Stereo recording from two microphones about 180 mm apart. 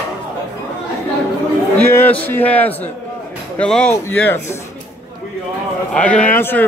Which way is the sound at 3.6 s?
5° left (ahead or behind).